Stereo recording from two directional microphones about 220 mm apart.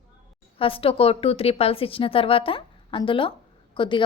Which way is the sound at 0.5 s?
25° left (ahead or behind).